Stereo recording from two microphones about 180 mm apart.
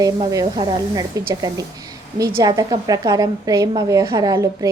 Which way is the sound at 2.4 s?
20° right (ahead or behind).